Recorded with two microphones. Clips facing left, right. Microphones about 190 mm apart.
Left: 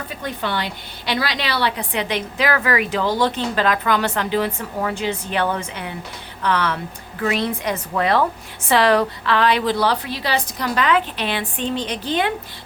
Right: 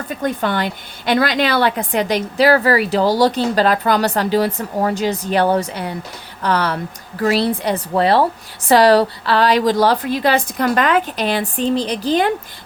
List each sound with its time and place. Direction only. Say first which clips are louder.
0.1 s a woman's voice: right 7 dB; 45° right (ahead or behind)